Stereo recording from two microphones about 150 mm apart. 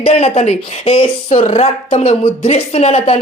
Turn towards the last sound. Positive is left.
turn(degrees=45)  # may be behind; listen again after turning